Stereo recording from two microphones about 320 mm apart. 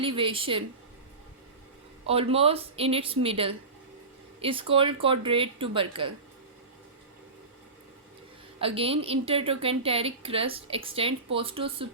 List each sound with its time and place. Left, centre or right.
0.0 s a woman's voice: centre
2.0 s a woman's voice: centre
8.6 s a woman's voice: centre